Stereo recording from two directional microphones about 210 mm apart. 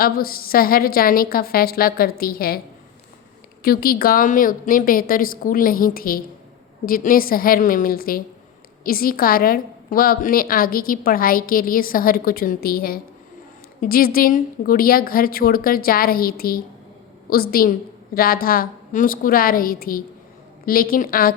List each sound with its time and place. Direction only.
0.0 s a woman's voice: 45° left (ahead or behind)
3.6 s a woman's voice: 45° left (ahead or behind)